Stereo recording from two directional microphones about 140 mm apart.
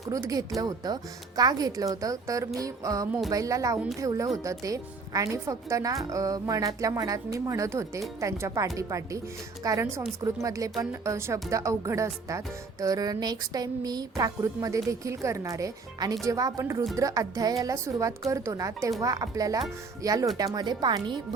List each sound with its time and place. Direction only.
0.0 s a woman's voice: 25° right (ahead or behind)